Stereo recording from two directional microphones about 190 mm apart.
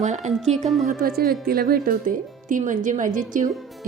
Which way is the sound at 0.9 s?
50° right (ahead or behind).